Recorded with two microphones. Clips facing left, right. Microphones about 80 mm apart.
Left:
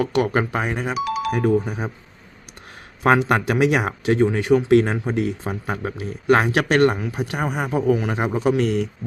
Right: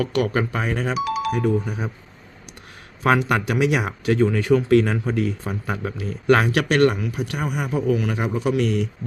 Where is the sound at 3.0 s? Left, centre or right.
Left.